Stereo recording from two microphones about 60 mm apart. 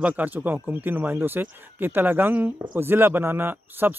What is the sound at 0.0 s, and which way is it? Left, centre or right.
Speech, right.